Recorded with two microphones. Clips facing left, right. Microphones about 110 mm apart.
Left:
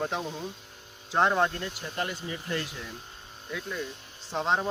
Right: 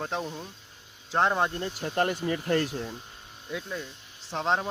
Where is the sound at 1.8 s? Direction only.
50° right (ahead or behind).